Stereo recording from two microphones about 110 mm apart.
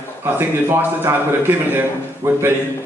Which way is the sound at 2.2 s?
25° right (ahead or behind).